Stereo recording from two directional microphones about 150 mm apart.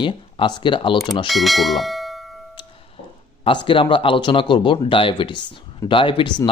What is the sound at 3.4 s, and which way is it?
Speech, 35° left (ahead or behind).